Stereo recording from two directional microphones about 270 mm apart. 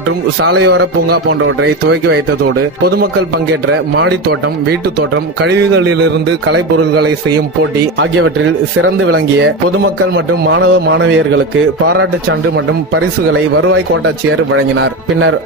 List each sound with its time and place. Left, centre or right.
0.4 s a man's voice: right
4.0 s a man's voice: right
8.8 s a man's voice: right